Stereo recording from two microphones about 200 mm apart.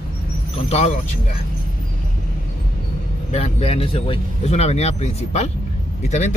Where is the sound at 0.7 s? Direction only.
30° left (ahead or behind).